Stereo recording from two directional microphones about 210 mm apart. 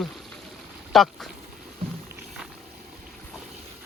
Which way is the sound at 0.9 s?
Centre (ahead or behind).